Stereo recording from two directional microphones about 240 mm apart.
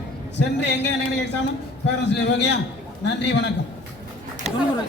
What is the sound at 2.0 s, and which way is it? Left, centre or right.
A man's voice, left.